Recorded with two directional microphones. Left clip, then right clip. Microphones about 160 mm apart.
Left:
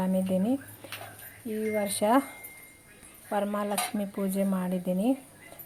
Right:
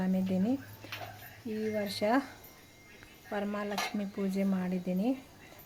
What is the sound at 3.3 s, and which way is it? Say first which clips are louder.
Speech: left 6 dB; 20° left (ahead or behind).